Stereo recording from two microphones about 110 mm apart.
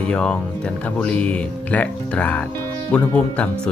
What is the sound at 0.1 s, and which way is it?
Speech, 5° left (ahead or behind).